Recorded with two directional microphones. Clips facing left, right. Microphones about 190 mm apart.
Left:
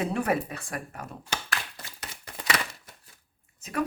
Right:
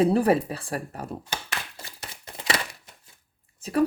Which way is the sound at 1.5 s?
25° right (ahead or behind).